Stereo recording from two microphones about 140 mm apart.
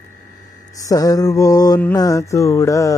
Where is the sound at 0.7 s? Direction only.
25° left (ahead or behind).